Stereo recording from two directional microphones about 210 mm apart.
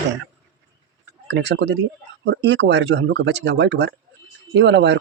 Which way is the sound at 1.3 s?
55° right (ahead or behind).